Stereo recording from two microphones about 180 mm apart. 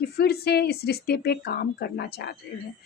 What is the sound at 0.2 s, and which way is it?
Speech, 60° left (ahead or behind).